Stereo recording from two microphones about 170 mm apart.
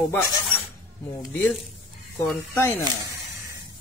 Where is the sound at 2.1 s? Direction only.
10° left (ahead or behind).